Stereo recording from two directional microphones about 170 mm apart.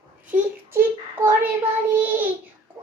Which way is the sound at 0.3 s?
10° right (ahead or behind).